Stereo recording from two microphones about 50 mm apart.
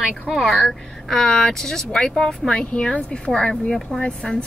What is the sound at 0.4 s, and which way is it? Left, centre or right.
Speech, centre.